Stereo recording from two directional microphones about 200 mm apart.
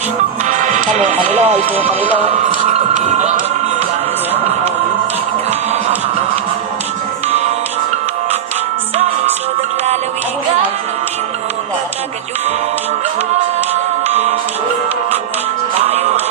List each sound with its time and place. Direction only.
0.4 s speech: 40° right (ahead or behind)
2.3 s a sound: 40° right (ahead or behind)
14.1 s music: 30° right (ahead or behind)
15.9 s music: 30° right (ahead or behind)